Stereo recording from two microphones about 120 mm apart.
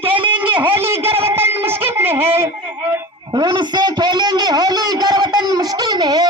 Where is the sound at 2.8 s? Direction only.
15° right (ahead or behind).